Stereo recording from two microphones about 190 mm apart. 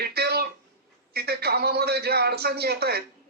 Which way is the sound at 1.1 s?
55° right (ahead or behind).